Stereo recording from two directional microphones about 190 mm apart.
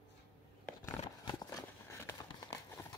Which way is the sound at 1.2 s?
20° left (ahead or behind).